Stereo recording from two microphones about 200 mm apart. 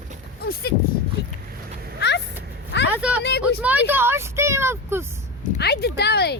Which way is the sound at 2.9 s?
5° right (ahead or behind).